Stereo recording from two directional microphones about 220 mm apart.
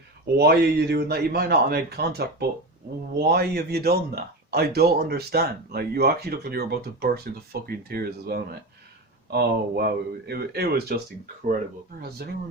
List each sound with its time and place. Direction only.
0.3 s speech: 50° right (ahead or behind)
12.0 s speech: 45° right (ahead or behind)